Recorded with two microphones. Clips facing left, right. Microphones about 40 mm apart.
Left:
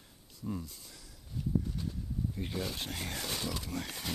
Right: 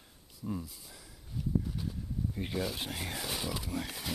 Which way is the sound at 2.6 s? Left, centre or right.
Centre.